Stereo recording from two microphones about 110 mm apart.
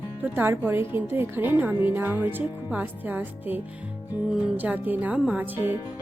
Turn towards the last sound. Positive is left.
turn(degrees=-10)  # may be behind; listen again after turning